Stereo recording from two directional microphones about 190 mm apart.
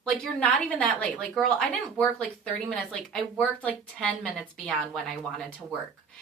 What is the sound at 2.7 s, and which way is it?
A woman's voice, 5° left (ahead or behind).